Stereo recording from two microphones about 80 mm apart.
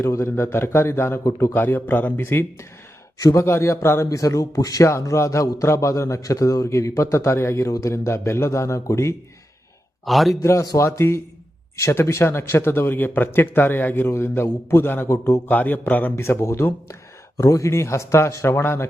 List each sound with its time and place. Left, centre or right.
0.0 s a man's voice: left
1.2 s a man's voice: left
1.5 s a man's voice: left
10.1 s a man's voice: centre
10.4 s a man's voice: left
15.4 s a man's voice: left